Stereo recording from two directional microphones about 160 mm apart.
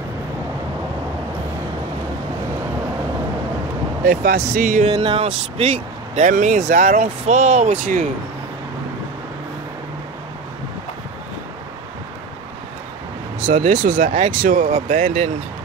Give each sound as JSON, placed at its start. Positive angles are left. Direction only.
{"t": 4.0, "sound": "speech", "side_deg": -65}
{"t": 4.8, "sound": "speech", "side_deg": -30}
{"t": 13.5, "sound": "speech", "side_deg": -55}